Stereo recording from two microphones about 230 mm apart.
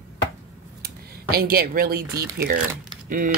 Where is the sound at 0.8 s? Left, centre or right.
Right.